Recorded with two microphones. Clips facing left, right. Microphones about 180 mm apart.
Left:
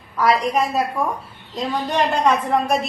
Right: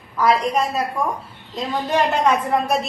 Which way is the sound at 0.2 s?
Centre (ahead or behind).